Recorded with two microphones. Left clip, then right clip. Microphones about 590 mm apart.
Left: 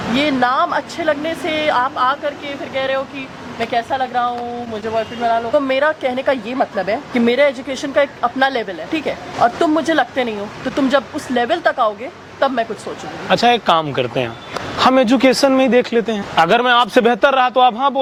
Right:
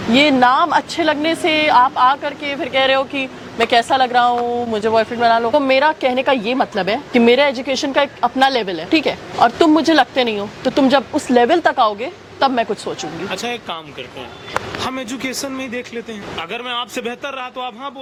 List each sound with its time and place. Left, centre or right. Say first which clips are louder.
0.2 s speech: right 3 dB; right
5.5 s a woman's voice: right 2 dB; right
13.3 s speech: left 15 dB; left
14.8 s speech: left 12 dB; left